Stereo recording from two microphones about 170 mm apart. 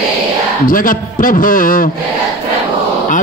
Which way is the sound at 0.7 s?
55° left (ahead or behind).